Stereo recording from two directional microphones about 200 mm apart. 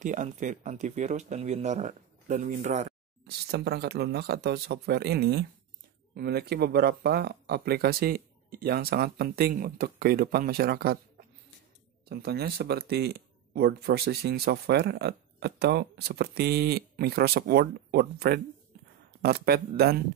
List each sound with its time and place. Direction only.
0.0 s speech: 40° right (ahead or behind)
3.3 s speech: 55° right (ahead or behind)